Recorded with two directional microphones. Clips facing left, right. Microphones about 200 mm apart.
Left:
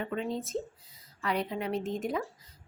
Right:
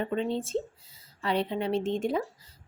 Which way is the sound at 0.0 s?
30° right (ahead or behind).